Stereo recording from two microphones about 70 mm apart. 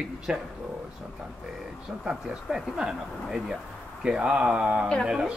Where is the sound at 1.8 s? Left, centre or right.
Centre.